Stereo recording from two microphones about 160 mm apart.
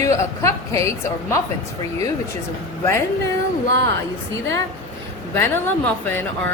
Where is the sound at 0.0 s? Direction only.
20° left (ahead or behind).